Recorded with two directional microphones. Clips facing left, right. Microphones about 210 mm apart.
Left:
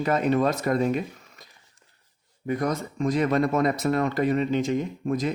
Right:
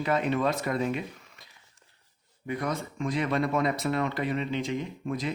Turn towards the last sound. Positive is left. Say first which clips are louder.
# left 5 dB
turn(degrees=45)  # may be behind; listen again after turning